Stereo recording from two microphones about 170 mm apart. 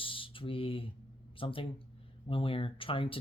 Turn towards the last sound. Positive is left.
turn(degrees=30)  # may be behind; listen again after turning